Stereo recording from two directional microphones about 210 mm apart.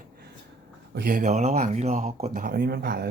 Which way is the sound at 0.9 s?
45° right (ahead or behind).